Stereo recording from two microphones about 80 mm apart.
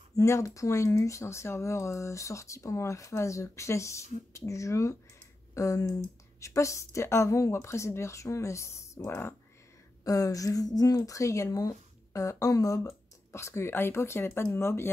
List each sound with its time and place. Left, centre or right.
0.1 s speech: left
10.0 s speech: left